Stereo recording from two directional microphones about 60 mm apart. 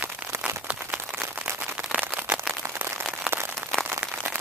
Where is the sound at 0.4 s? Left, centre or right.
Right.